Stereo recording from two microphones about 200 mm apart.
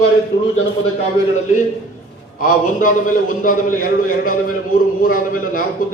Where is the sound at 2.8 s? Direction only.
45° left (ahead or behind).